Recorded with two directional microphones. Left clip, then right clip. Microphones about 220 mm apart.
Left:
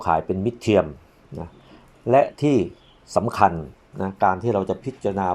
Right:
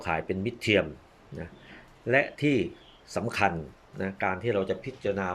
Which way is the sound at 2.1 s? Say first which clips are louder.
Left 7 dB; 15° left (ahead or behind).